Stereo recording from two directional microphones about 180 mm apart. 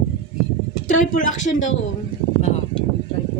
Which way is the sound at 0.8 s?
45° left (ahead or behind).